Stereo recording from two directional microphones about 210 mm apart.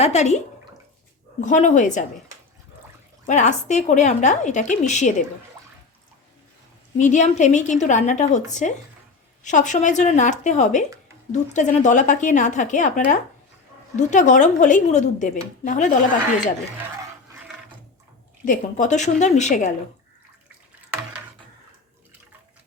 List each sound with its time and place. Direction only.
0.0 s a woman's voice: 30° left (ahead or behind)
3.2 s a woman's voice: 35° left (ahead or behind)
7.0 s a woman's voice: 35° left (ahead or behind)
18.4 s a woman's voice: 35° left (ahead or behind)